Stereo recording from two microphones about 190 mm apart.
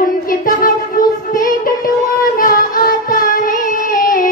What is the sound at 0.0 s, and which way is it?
Music, 45° left (ahead or behind).